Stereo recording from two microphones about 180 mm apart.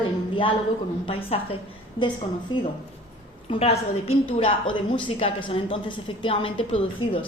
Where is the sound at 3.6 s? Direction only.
35° left (ahead or behind).